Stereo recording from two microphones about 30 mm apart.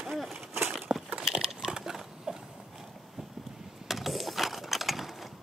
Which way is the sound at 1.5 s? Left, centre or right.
Centre.